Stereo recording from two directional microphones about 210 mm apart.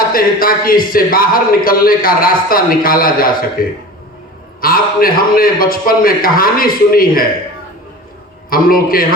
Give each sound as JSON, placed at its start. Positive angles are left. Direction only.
{"t": 0.1, "sound": "speech", "side_deg": 45}
{"t": 8.4, "sound": "speech", "side_deg": 45}